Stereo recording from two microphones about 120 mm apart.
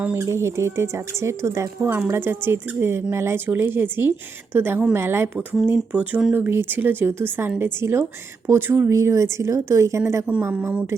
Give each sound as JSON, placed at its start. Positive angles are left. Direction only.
{"t": 0.0, "sound": "speech", "side_deg": -20}